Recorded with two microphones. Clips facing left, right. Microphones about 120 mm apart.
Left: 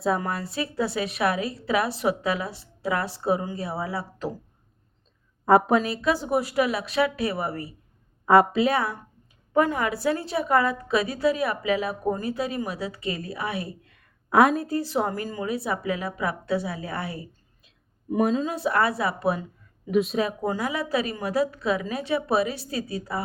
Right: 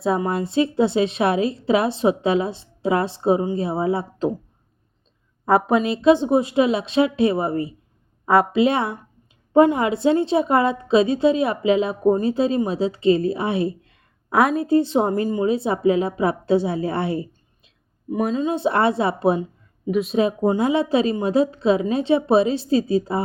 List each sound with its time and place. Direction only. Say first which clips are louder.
0.2 s a woman's voice: right 9 dB; 25° right (ahead or behind)
5.5 s a woman's voice: right 1 dB; centre (ahead or behind)
5.8 s a woman's voice: right 9 dB; 25° right (ahead or behind)
8.3 s a woman's voice: right 1 dB; centre (ahead or behind)
8.6 s a woman's voice: right 4 dB; 25° right (ahead or behind)
14.3 s a woman's voice: right 1 dB; centre (ahead or behind)
14.7 s a woman's voice: right 8 dB; 25° right (ahead or behind)
18.1 s a woman's voice: right 1 dB; centre (ahead or behind)
18.4 s a woman's voice: right 5 dB; 25° right (ahead or behind)
19.9 s a woman's voice: right 1 dB; centre (ahead or behind)
20.1 s a woman's voice: right 7 dB; 25° right (ahead or behind)